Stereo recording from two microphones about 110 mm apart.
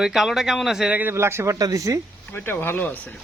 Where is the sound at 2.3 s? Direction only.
20° left (ahead or behind).